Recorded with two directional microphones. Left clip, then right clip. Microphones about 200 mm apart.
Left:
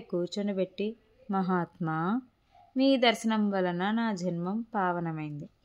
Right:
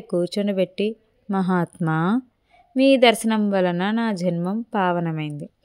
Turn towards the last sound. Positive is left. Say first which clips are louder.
# right 8 dB
turn(degrees=-40)  # may be behind; listen again after turning